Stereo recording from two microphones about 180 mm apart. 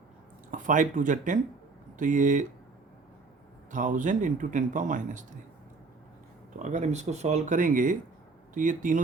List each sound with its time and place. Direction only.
0.5 s speech: 45° right (ahead or behind)
3.7 s speech: 45° right (ahead or behind)
6.6 s speech: 40° right (ahead or behind)